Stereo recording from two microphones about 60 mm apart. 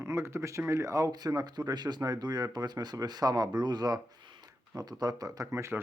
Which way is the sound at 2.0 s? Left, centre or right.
Right.